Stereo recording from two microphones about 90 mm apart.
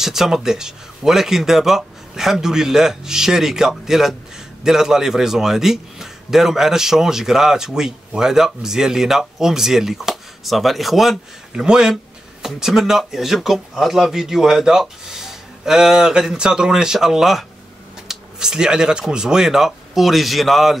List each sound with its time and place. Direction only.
0.0 s a man's voice: 5° right (ahead or behind)